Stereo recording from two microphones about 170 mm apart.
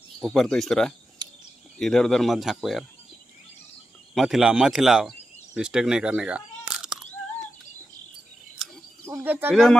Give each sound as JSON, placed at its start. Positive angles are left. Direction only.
{"t": 0.2, "sound": "speech", "side_deg": 0}
{"t": 1.2, "sound": "cricket", "side_deg": -25}
{"t": 1.8, "sound": "speech", "side_deg": 5}
{"t": 4.1, "sound": "speech", "side_deg": 0}
{"t": 9.0, "sound": "speech", "side_deg": -10}
{"t": 9.5, "sound": "speech", "side_deg": 0}